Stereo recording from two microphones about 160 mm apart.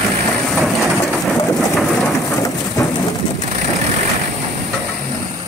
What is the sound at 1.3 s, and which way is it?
Rain, centre (ahead or behind).